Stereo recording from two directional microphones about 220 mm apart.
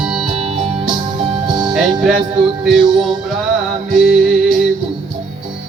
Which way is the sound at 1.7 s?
Centre (ahead or behind).